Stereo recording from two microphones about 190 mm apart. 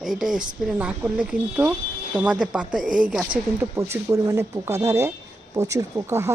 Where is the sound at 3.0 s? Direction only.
5° right (ahead or behind).